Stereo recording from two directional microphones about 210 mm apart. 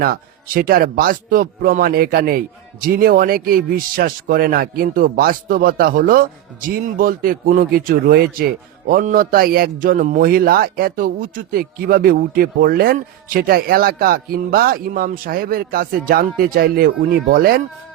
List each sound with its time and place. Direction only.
0.0 s a man's voice: 45° right (ahead or behind)